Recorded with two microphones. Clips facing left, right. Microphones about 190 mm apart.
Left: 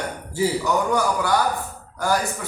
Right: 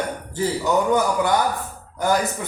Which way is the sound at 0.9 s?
20° right (ahead or behind).